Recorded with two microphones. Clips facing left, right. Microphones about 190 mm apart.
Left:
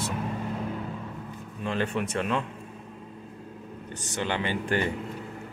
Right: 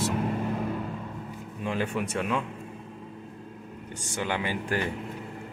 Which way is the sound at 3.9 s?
10° right (ahead or behind).